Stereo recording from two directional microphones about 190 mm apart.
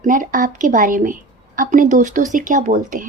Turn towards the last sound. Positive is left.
turn(degrees=-40)  # may be behind; listen again after turning